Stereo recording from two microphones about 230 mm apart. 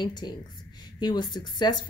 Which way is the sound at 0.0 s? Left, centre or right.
Centre.